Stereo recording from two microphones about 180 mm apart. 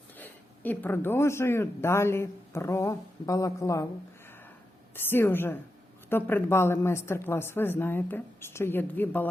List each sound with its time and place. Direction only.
0.2 s a woman's voice: 10° left (ahead or behind)
4.9 s a woman's voice: 10° left (ahead or behind)